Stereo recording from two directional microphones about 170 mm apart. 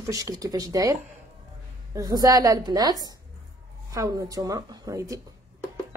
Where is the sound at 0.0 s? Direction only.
20° right (ahead or behind).